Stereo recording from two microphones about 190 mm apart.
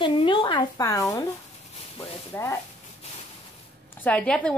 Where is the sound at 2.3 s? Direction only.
10° left (ahead or behind).